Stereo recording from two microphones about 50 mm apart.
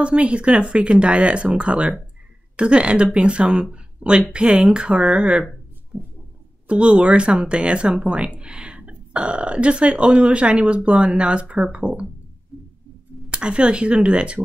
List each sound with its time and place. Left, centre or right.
0.0 s speech: right
3.7 s a sound: right
4.3 s speech: right
6.7 s speech: right
13.3 s speech: right